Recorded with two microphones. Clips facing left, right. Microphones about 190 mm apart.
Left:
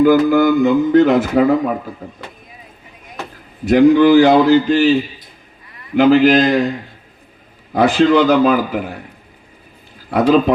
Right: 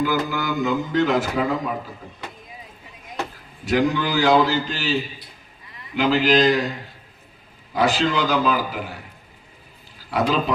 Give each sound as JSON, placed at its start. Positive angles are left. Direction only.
{"t": 0.0, "sound": "a man's voice", "side_deg": 55}
{"t": 3.7, "sound": "a man's voice", "side_deg": 55}
{"t": 7.7, "sound": "a man's voice", "side_deg": 55}
{"t": 10.1, "sound": "a man's voice", "side_deg": 55}